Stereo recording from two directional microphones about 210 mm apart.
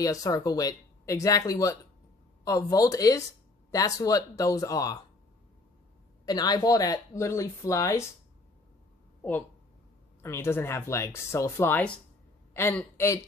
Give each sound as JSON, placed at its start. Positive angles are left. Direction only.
{"t": 0.0, "sound": "speech", "side_deg": 15}
{"t": 6.2, "sound": "speech", "side_deg": 20}
{"t": 10.2, "sound": "speech", "side_deg": 10}